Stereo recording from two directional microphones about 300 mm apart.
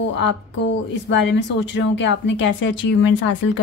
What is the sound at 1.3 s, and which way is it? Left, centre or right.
Speech, left.